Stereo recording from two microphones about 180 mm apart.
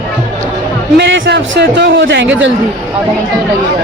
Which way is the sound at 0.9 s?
75° right (ahead or behind).